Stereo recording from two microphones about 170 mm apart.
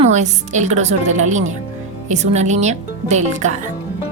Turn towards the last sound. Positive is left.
turn(degrees=-45)  # may be behind; listen again after turning